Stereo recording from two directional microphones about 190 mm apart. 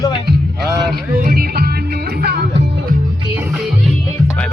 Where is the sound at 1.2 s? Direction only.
50° right (ahead or behind).